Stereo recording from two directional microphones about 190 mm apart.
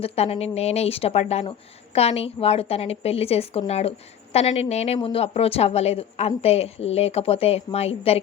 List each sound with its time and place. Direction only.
0.0 s a woman's voice: 30° left (ahead or behind)